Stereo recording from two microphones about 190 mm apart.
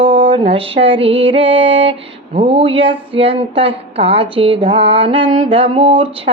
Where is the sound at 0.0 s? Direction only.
25° right (ahead or behind).